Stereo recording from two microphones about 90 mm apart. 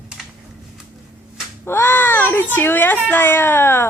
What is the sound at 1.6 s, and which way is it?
A child's voice, 25° left (ahead or behind).